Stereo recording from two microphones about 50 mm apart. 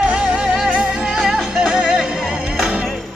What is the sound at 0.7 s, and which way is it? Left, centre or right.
Music, centre.